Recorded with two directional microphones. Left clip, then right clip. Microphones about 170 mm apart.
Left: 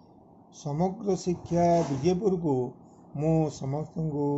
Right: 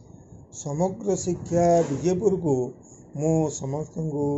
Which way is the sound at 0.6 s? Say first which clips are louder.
Right 4 dB; 15° left (ahead or behind).